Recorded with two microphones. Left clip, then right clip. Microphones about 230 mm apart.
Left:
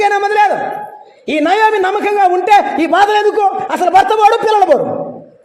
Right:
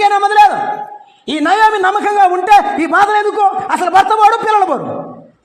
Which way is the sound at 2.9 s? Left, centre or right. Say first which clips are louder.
Left 1 dB; right.